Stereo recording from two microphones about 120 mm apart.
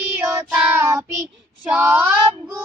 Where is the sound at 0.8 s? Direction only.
25° right (ahead or behind).